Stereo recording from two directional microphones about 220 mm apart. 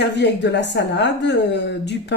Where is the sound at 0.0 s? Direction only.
50° left (ahead or behind).